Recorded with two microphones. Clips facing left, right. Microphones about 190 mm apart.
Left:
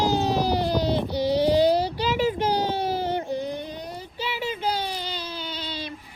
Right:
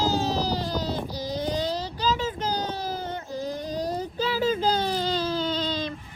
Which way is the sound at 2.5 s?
25° left (ahead or behind).